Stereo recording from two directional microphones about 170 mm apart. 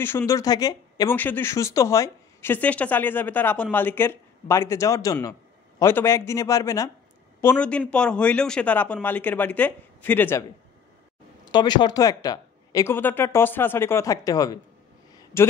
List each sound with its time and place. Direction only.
0.0 s speech: 15° left (ahead or behind)
1.1 s speech: 10° left (ahead or behind)
7.4 s speech: 10° left (ahead or behind)
11.5 s speech: 25° left (ahead or behind)